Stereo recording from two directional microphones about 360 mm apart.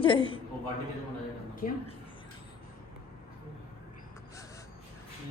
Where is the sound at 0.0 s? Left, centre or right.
Centre.